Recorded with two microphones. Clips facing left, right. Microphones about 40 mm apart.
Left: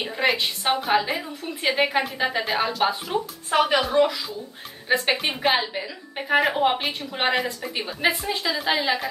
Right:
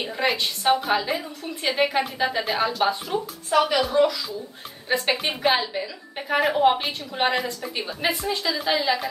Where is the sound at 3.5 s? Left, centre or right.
Left.